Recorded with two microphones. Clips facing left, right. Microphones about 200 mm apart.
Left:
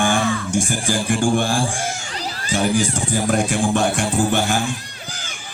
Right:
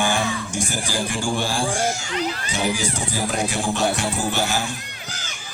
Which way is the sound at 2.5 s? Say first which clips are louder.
Left 9 dB; 50° left (ahead or behind).